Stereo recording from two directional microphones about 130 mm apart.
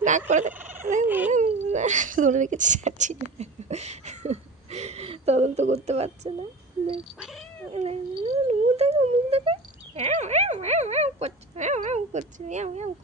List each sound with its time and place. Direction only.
0.3 s fowl: 75° right (ahead or behind)
1.0 s speech: 15° right (ahead or behind)
1.3 s speech: 65° right (ahead or behind)
7.7 s a sound: 50° right (ahead or behind)